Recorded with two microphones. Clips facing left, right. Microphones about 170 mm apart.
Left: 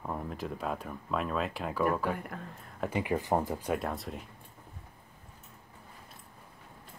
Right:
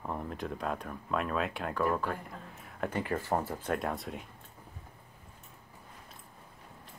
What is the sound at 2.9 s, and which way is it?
Speech, 15° left (ahead or behind).